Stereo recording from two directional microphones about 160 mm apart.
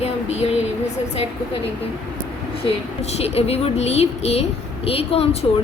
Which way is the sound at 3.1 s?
40° left (ahead or behind).